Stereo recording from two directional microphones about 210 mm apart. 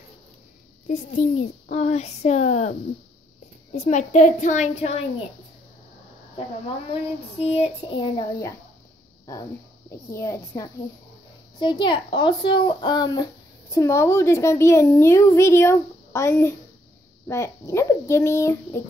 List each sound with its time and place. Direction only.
0.8 s a child's voice: 35° left (ahead or behind)
3.7 s a child's voice: 35° left (ahead or behind)
6.9 s child singing: 30° left (ahead or behind)
9.2 s a woman's voice: 15° left (ahead or behind)